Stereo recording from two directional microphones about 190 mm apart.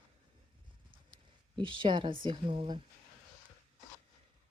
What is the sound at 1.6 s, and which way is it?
Speech, 25° right (ahead or behind).